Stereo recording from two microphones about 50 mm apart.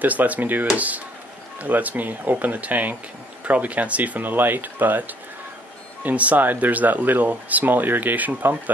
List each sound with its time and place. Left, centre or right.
0.0 s speech: right